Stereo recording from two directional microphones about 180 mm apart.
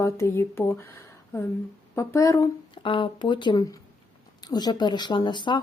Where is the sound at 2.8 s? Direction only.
30° left (ahead or behind).